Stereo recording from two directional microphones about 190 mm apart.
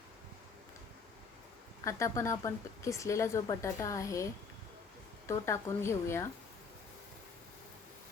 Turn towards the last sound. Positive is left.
turn(degrees=15)  # may be behind; listen again after turning